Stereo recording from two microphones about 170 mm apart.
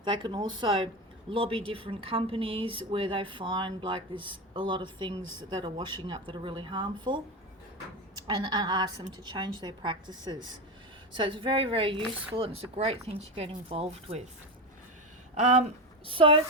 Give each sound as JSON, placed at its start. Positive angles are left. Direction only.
{"t": 0.0, "sound": "speech", "side_deg": -25}
{"t": 8.4, "sound": "speech", "side_deg": -25}
{"t": 15.4, "sound": "speech", "side_deg": -40}
{"t": 16.0, "sound": "speech", "side_deg": -30}